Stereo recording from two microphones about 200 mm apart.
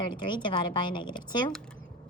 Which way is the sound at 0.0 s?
25° left (ahead or behind).